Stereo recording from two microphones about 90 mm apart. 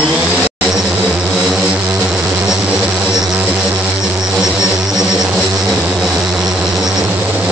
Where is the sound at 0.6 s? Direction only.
5° right (ahead or behind).